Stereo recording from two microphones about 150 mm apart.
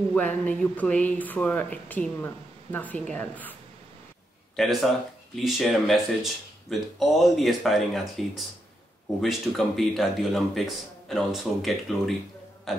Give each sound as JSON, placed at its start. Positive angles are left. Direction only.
{"t": 0.1, "sound": "speech", "side_deg": 10}
{"t": 4.6, "sound": "speech", "side_deg": 0}
{"t": 12.7, "sound": "burping", "side_deg": 0}